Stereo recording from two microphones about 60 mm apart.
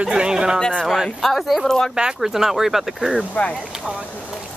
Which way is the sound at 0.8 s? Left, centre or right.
Centre.